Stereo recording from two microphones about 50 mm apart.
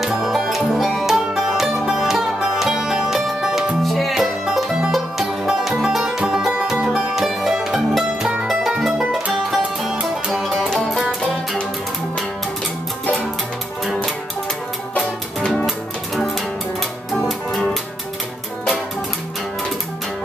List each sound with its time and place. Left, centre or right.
0.0 s music: centre
3.8 s music: centre
4.9 s music: centre
10.3 s music: centre
15.0 s music: centre
17.1 s music: centre